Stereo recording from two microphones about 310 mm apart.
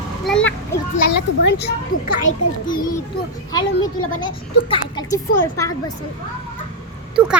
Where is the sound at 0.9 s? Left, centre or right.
Left.